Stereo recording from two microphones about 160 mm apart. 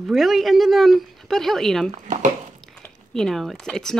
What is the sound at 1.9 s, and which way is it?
Speech, 50° right (ahead or behind).